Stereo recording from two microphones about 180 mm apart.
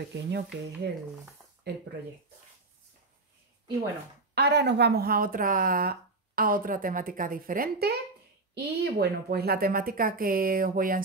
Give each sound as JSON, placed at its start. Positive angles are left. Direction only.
{"t": 0.1, "sound": "speech", "side_deg": -70}
{"t": 4.4, "sound": "a woman's voice", "side_deg": -65}